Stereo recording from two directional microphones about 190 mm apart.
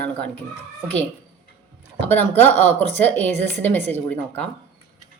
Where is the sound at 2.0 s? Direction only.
10° left (ahead or behind).